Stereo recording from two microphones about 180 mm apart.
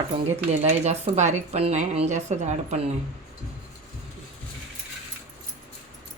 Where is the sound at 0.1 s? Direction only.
35° right (ahead or behind).